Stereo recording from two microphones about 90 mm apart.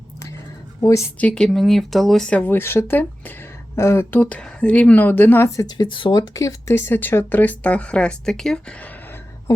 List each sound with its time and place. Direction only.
0.8 s a woman's voice: 35° left (ahead or behind)
1.2 s speech: 10° left (ahead or behind)
2.5 s speech: 25° left (ahead or behind)
5.7 s speech: 60° left (ahead or behind); by 6.7 s 40° left (ahead or behind)
6.7 s speech: 25° left (ahead or behind); by 8.5 s 5° left (ahead or behind)
9.5 s speech: 40° left (ahead or behind)